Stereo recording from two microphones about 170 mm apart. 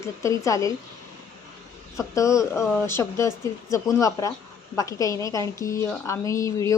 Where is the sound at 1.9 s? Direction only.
20° left (ahead or behind).